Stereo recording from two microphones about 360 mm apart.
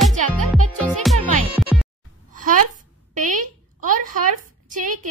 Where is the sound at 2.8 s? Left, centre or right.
Right.